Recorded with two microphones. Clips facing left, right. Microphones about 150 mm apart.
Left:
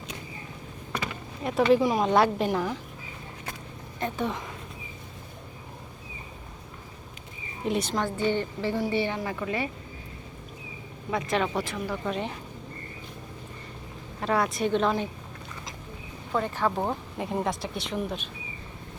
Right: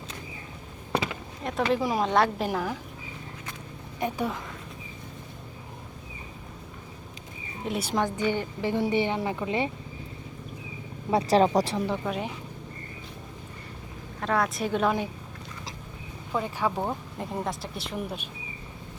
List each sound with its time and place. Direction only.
1.5 s speech: centre (ahead or behind)
4.0 s speech: 5° right (ahead or behind)
7.6 s speech: 5° right (ahead or behind)
7.9 s a woman's voice: 15° right (ahead or behind)
11.1 s speech: 35° right (ahead or behind)
12.0 s speech: 5° right (ahead or behind)
14.2 s speech: centre (ahead or behind)
16.3 s a woman's voice: 10° right (ahead or behind)
16.7 s speech: 5° left (ahead or behind)